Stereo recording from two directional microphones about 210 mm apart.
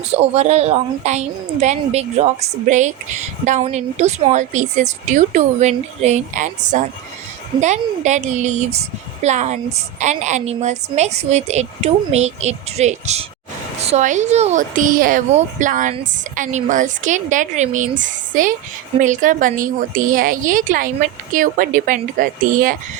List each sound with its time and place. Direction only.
0.1 s a woman's voice: 30° right (ahead or behind)